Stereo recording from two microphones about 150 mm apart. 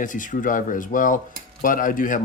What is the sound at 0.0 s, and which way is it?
Speech, 60° left (ahead or behind).